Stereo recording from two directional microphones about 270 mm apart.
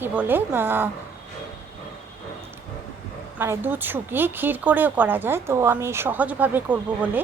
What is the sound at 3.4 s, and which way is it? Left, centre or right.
Speech, centre.